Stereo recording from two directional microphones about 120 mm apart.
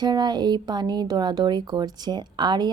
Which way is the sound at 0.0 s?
35° right (ahead or behind).